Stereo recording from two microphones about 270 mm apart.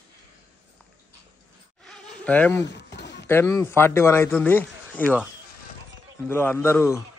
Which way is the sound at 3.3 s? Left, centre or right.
Centre.